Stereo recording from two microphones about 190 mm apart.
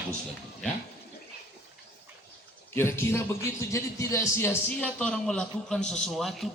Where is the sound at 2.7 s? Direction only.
15° left (ahead or behind).